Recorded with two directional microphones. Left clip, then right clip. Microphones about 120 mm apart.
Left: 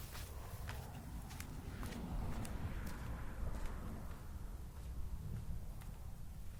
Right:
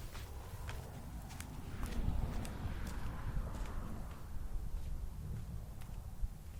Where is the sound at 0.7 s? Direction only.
75° left (ahead or behind).